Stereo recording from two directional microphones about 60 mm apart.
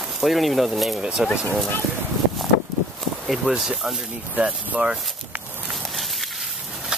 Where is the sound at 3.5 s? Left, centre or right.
Centre.